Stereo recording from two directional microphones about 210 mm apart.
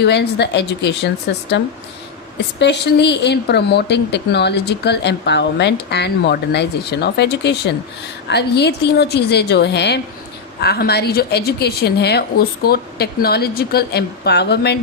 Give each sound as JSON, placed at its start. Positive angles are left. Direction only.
{"t": 0.0, "sound": "speech", "side_deg": 55}